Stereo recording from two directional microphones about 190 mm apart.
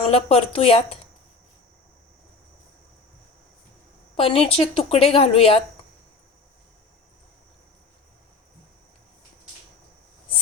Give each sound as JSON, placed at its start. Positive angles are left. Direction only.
{"t": 0.1, "sound": "speech", "side_deg": 30}
{"t": 4.2, "sound": "a woman's voice", "side_deg": 30}